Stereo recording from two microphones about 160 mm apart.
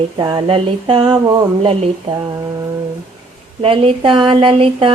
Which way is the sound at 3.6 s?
35° right (ahead or behind).